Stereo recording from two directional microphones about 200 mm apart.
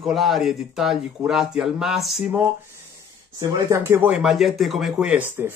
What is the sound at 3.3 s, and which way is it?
Speech, 15° right (ahead or behind).